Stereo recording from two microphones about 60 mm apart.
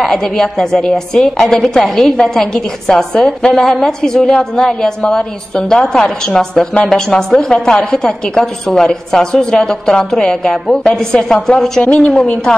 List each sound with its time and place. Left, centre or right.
0.0 s a woman's voice: centre